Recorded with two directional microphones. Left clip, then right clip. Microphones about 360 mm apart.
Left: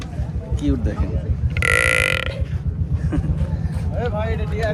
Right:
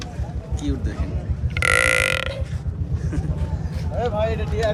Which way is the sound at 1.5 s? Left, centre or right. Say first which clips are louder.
Left 1 dB; centre.